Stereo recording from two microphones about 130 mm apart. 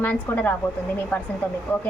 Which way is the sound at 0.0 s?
15° left (ahead or behind).